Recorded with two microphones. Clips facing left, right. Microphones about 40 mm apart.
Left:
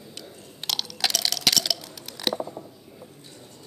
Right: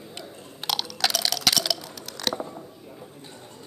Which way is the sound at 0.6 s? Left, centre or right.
Centre.